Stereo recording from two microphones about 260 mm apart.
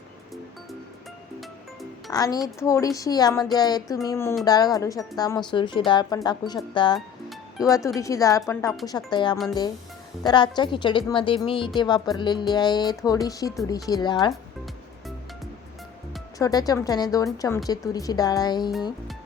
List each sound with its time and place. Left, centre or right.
2.0 s a woman's voice: centre
16.4 s a woman's voice: centre